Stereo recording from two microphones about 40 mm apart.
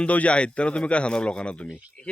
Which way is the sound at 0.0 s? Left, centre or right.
Left.